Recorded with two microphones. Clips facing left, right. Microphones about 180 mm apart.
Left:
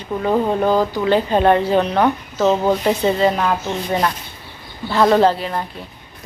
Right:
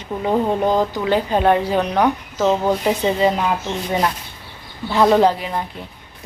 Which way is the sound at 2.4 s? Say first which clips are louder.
Left 1 dB; 5° left (ahead or behind).